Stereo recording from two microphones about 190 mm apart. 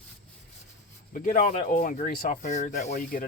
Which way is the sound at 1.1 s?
40° left (ahead or behind).